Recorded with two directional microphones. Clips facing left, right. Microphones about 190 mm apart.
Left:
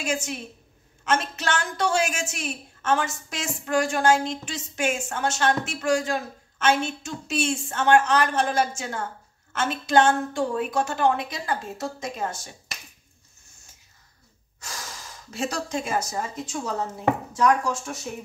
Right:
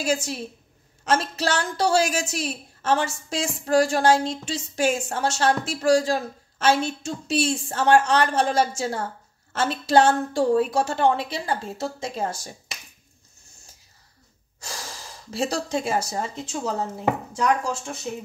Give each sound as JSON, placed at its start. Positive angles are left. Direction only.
{"t": 0.0, "sound": "a woman's voice", "side_deg": -35}
{"t": 14.6, "sound": "speech", "side_deg": -30}